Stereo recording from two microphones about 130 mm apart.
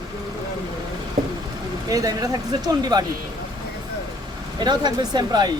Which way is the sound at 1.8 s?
30° right (ahead or behind).